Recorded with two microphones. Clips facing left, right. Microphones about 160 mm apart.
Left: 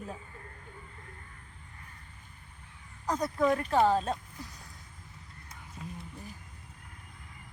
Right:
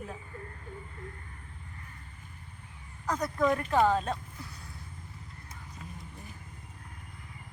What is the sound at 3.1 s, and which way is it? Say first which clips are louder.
Speech: even; 10° left (ahead or behind).